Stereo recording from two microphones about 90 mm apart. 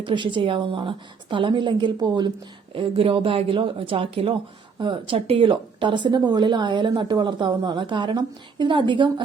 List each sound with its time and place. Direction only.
0.0 s speech: 60° right (ahead or behind)
2.7 s speech: 85° right
4.8 s speech: 70° right (ahead or behind)